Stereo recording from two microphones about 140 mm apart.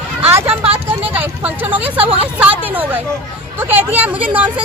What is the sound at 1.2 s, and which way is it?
Vehicle, 10° right (ahead or behind).